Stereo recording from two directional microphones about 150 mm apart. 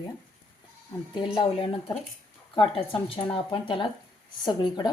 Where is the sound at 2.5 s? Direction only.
35° left (ahead or behind).